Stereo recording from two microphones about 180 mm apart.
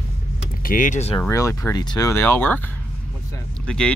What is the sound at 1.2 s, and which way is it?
Speech, 15° left (ahead or behind).